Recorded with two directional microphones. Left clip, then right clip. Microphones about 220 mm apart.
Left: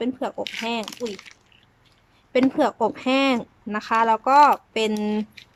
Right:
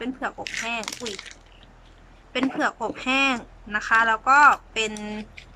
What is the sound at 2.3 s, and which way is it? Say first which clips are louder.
A woman's voice: left 4 dB; 20° left (ahead or behind).